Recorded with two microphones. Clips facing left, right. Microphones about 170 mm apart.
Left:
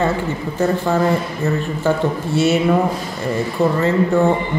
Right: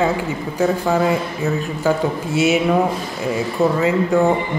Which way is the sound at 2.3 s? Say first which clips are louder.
Even; 40° left (ahead or behind).